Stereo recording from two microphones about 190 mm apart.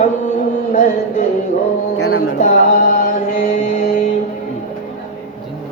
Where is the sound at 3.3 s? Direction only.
40° left (ahead or behind).